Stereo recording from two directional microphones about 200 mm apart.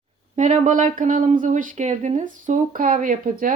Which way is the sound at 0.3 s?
35° right (ahead or behind).